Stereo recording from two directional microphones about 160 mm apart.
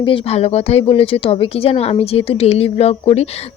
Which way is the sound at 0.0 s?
35° left (ahead or behind).